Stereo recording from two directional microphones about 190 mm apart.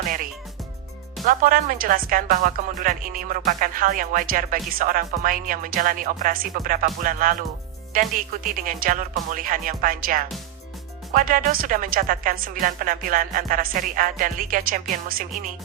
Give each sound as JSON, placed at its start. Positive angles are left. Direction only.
{"t": 1.2, "sound": "a woman's voice", "side_deg": -45}